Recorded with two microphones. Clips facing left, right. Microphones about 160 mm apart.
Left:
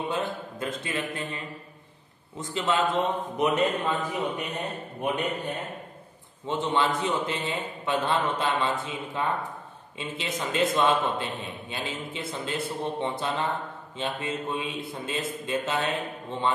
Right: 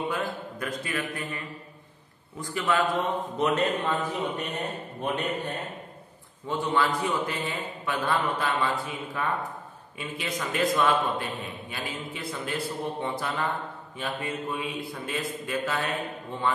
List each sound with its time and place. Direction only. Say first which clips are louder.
0.1 s a man's voice: left 1 dB; 25° left (ahead or behind)
6.4 s a man's voice: even; 20° left (ahead or behind)